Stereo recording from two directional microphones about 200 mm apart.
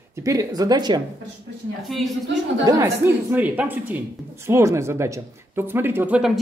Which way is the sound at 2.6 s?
15° right (ahead or behind).